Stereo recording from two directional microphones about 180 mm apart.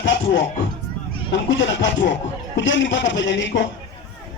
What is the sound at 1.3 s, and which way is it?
A man's voice, 90° left.